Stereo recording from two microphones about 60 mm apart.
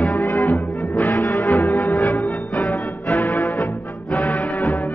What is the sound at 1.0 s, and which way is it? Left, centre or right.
Music, left.